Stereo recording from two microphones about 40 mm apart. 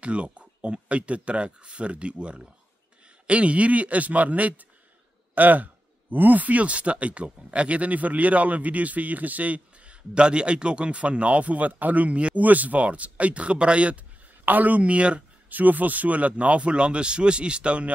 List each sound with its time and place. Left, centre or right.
0.0 s speech: right
10.1 s speech: right
12.4 s speech: right
14.4 s speech: right
15.5 s speech: right